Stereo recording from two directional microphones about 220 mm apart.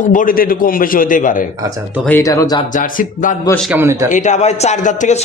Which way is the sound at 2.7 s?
35° left (ahead or behind).